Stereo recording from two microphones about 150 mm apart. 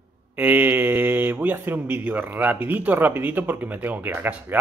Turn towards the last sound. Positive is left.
turn(degrees=-10)  # may be behind; listen again after turning